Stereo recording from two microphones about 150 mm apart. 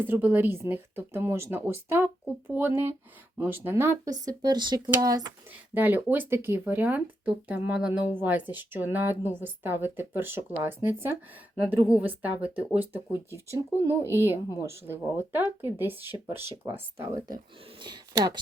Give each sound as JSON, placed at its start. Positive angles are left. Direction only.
{"t": 0.1, "sound": "speech", "side_deg": -10}
{"t": 4.3, "sound": "speech", "side_deg": -30}
{"t": 5.5, "sound": "speech", "side_deg": -10}
{"t": 17.7, "sound": "speech", "side_deg": -30}